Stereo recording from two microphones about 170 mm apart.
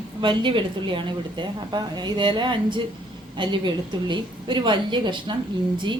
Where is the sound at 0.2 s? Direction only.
30° right (ahead or behind).